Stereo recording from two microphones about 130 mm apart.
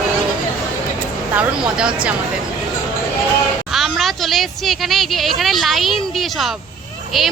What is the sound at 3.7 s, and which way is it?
Speech, centre (ahead or behind).